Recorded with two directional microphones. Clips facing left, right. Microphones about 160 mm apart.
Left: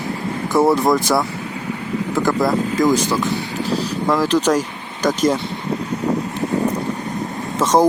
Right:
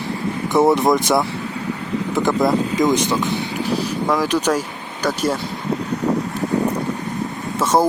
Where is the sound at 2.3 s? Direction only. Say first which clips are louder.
Right 1 dB; centre (ahead or behind).